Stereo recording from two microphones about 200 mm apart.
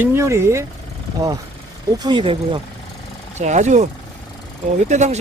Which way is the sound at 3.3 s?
35° right (ahead or behind).